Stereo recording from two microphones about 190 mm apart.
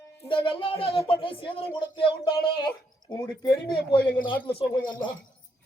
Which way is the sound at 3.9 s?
25° left (ahead or behind).